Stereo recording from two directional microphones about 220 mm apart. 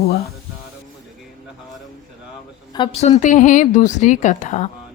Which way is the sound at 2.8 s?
30° left (ahead or behind).